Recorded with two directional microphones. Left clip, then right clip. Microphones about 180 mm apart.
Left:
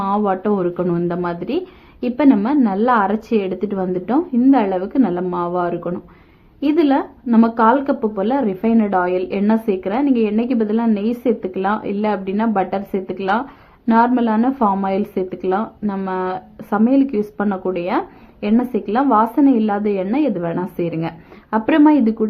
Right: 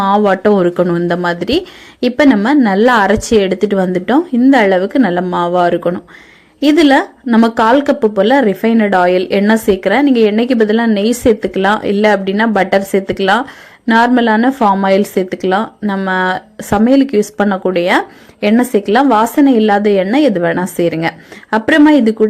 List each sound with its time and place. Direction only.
0.0 s a woman's voice: 30° right (ahead or behind)